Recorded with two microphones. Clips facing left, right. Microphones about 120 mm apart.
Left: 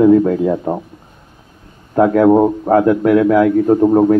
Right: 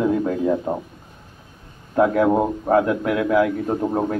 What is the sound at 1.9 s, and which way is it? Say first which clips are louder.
A man's voice: left 7 dB; 35° left (ahead or behind).